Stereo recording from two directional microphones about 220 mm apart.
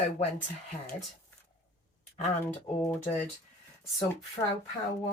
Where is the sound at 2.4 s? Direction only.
10° left (ahead or behind).